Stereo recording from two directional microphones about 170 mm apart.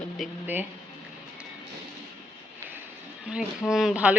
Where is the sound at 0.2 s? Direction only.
Centre (ahead or behind).